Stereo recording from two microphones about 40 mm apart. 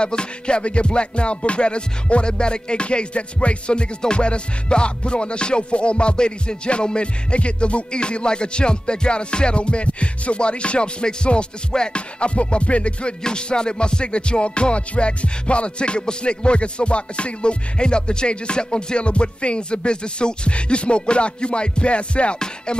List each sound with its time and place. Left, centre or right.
0.0 s music: left